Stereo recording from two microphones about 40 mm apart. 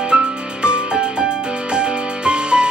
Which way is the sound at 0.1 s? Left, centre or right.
Right.